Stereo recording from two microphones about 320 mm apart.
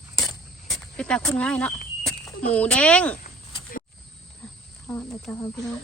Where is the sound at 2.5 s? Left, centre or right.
Centre.